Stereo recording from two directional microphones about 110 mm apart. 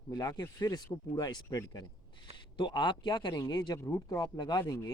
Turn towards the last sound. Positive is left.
turn(degrees=35)  # may be behind; listen again after turning